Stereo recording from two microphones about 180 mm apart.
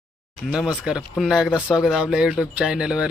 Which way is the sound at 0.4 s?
Centre (ahead or behind).